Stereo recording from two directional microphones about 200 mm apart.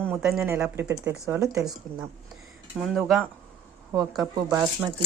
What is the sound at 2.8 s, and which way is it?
Speech, centre (ahead or behind).